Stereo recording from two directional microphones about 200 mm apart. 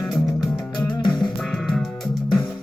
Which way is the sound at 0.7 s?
25° left (ahead or behind).